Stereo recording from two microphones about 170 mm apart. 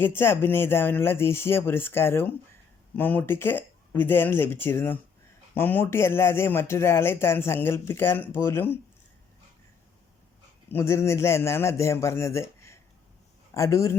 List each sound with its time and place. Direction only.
0.0 s speech: 15° left (ahead or behind)
10.7 s a man's voice: 15° left (ahead or behind)